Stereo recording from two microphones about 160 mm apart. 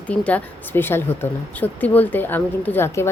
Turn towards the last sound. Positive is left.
turn(degrees=15)  # may be behind; listen again after turning